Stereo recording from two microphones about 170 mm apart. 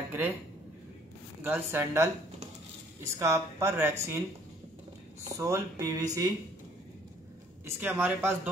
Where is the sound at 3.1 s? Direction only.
15° right (ahead or behind).